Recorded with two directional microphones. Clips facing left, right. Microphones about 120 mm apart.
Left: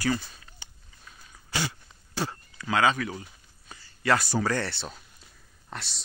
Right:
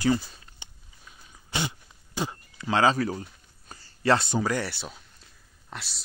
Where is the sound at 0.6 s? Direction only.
20° right (ahead or behind); by 3.3 s 35° right (ahead or behind).